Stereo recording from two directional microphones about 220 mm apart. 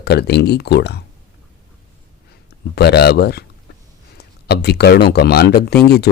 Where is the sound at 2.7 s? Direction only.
50° left (ahead or behind).